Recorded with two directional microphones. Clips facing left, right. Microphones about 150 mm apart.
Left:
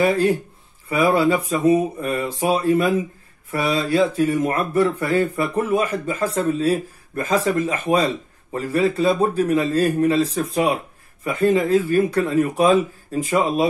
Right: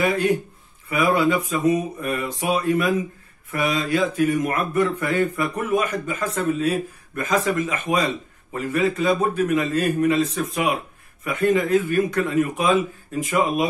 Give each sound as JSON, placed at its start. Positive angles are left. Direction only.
{"t": 0.0, "sound": "a man's voice", "side_deg": 30}